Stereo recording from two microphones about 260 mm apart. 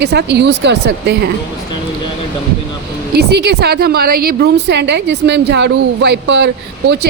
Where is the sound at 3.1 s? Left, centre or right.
Right.